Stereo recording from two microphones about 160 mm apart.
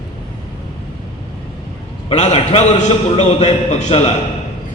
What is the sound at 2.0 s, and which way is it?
A man's voice, 40° left (ahead or behind).